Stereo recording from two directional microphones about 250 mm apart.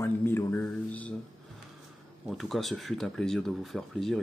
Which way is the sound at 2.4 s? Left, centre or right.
Centre.